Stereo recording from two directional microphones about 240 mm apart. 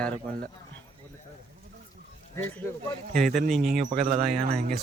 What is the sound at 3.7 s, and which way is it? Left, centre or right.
Speech, right.